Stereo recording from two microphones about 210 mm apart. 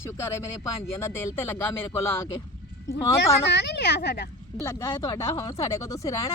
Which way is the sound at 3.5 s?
55° left (ahead or behind).